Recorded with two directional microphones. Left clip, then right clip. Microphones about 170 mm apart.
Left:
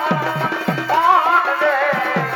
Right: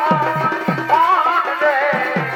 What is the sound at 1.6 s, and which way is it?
Music, 35° left (ahead or behind).